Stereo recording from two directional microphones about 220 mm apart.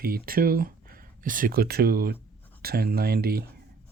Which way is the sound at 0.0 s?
40° right (ahead or behind).